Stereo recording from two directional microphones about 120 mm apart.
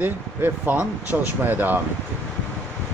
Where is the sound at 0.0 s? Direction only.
15° right (ahead or behind).